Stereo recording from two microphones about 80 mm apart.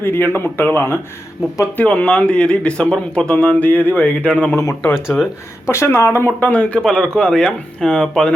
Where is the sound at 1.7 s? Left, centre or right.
Centre.